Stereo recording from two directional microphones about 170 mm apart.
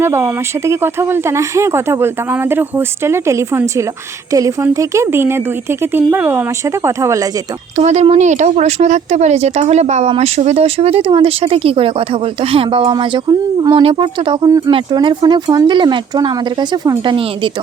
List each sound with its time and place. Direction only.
0.0 s speech: 15° right (ahead or behind)
7.8 s speech: 40° right (ahead or behind)